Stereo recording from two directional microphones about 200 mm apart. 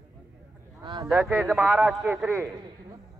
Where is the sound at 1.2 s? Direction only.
Centre (ahead or behind).